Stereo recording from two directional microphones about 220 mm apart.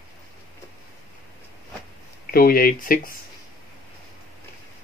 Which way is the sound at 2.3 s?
40° left (ahead or behind).